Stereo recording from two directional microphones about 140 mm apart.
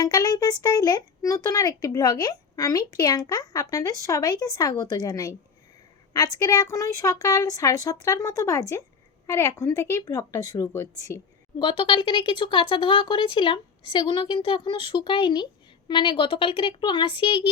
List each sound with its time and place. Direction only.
0.0 s speech: 25° left (ahead or behind)
11.8 s speech: 35° left (ahead or behind)